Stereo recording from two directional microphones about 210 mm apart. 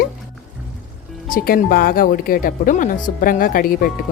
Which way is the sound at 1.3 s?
45° left (ahead or behind).